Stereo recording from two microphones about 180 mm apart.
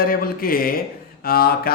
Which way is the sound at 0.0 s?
55° left (ahead or behind).